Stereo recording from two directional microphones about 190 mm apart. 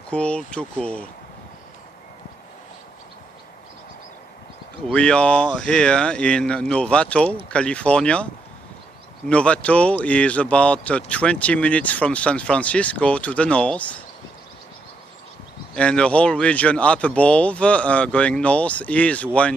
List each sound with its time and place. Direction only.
0.1 s speech: 5° left (ahead or behind)
4.8 s speech: 5° left (ahead or behind)
9.3 s speech: 5° left (ahead or behind)
15.7 s speech: 5° left (ahead or behind)